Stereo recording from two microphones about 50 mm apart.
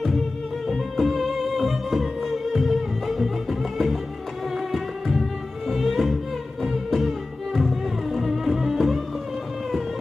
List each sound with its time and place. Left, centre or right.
0.7 s music: centre